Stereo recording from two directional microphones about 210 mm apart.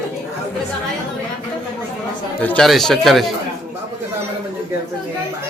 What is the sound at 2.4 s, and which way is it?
Speech, 5° left (ahead or behind).